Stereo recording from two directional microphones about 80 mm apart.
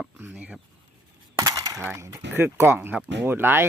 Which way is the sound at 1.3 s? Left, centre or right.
Right.